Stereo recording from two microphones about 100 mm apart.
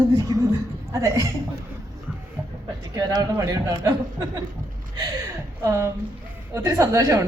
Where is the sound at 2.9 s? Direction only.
40° right (ahead or behind).